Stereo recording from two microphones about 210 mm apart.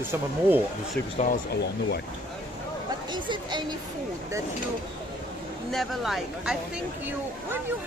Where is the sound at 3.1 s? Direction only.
20° right (ahead or behind).